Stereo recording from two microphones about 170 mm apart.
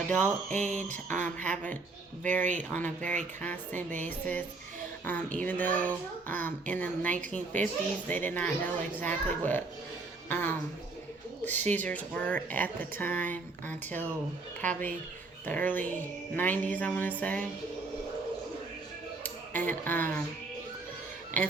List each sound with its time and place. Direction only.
0.5 s speech: 45° right (ahead or behind)
0.9 s a woman's voice: 10° left (ahead or behind)
19.2 s speech: 10° left (ahead or behind)